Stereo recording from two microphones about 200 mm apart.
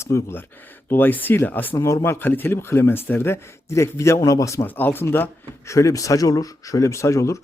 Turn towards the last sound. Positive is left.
turn(degrees=15)  # may be behind; listen again after turning